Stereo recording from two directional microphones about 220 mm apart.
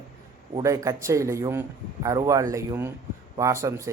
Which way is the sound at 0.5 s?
15° right (ahead or behind).